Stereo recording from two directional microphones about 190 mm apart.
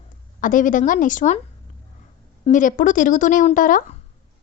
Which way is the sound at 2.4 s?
40° left (ahead or behind).